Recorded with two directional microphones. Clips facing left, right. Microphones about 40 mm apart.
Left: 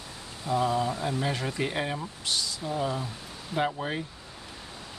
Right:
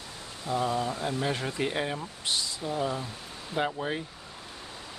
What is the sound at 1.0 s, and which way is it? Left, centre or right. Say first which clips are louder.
Speech: even; centre.